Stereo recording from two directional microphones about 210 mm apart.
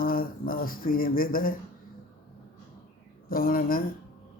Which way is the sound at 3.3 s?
45° left (ahead or behind).